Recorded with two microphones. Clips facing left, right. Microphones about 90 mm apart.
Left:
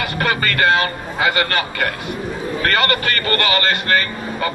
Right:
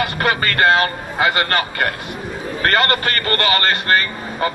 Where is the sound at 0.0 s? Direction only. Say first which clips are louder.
Right 1 dB; 35° right (ahead or behind).